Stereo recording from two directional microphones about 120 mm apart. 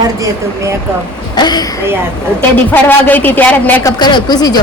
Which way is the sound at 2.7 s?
15° left (ahead or behind).